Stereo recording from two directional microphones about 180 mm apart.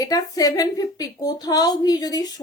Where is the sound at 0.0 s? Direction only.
20° left (ahead or behind).